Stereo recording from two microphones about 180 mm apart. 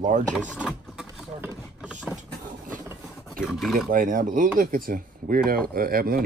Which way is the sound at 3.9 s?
45° right (ahead or behind).